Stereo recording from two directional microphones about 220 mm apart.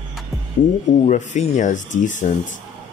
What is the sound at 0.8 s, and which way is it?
Speech, 35° left (ahead or behind).